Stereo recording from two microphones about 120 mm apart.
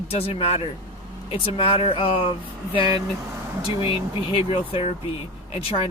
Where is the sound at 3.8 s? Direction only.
45° left (ahead or behind).